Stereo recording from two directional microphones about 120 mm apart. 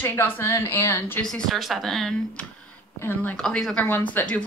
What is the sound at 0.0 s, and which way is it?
A woman's voice, 20° left (ahead or behind).